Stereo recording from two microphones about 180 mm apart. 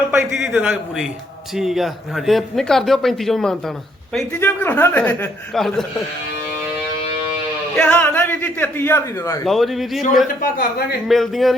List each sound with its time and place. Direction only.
0.1 s a man's voice: 5° right (ahead or behind)
7.8 s a man's voice: 10° left (ahead or behind)
9.4 s a man's voice: centre (ahead or behind)
10.4 s a man's voice: 55° left (ahead or behind)
11.1 s a man's voice: centre (ahead or behind)